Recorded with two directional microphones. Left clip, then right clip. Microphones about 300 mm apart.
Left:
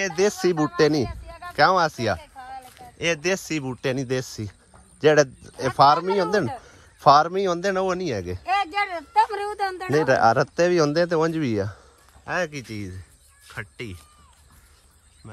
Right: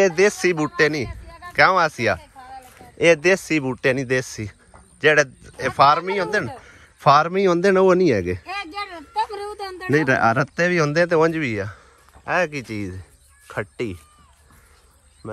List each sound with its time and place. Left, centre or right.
0.0 s speech: centre
2.3 s a man's voice: centre
9.9 s speech: centre